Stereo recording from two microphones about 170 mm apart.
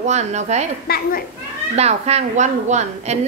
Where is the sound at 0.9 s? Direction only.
65° left (ahead or behind).